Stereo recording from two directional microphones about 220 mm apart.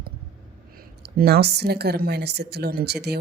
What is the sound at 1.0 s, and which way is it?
Speech, 45° right (ahead or behind).